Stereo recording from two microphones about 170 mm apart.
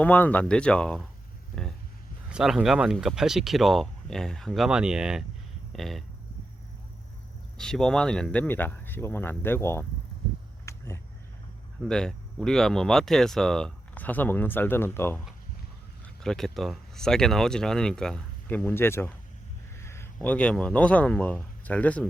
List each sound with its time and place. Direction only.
0.0 s speech: 10° left (ahead or behind)
2.3 s speech: 5° right (ahead or behind)
7.6 s speech: 5° left (ahead or behind)
10.7 s a sound: 15° left (ahead or behind)
11.8 s speech: 5° left (ahead or behind)
16.2 s speech: 5° left (ahead or behind)
19.7 s a sound: 15° left (ahead or behind)
20.1 s speech: 5° left (ahead or behind)